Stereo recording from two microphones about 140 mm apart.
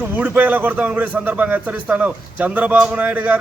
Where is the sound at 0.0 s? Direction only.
10° right (ahead or behind).